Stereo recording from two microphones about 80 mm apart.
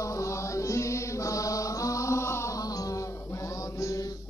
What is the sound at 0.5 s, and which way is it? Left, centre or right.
Chant, left.